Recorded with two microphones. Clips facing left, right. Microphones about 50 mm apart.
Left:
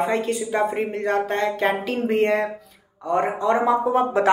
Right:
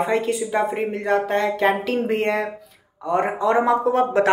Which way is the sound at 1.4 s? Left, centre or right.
Right.